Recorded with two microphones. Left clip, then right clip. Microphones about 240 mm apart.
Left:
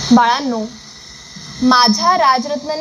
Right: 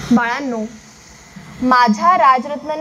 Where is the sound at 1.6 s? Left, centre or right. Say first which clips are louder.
Even; left.